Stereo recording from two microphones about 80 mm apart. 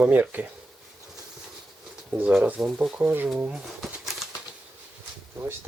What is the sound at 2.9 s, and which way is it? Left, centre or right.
Speech, right.